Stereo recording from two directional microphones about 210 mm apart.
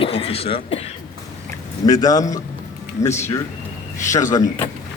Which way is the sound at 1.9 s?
15° left (ahead or behind).